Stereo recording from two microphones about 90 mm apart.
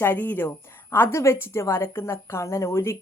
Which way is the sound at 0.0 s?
20° left (ahead or behind).